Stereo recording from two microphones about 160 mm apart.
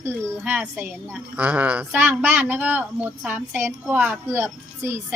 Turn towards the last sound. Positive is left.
turn(degrees=-15)  # may be behind; listen again after turning